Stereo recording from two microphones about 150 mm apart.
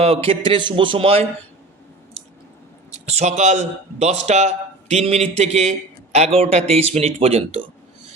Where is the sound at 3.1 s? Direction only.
50° right (ahead or behind).